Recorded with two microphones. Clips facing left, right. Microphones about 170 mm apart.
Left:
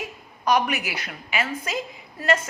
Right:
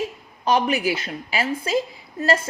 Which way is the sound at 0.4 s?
30° right (ahead or behind).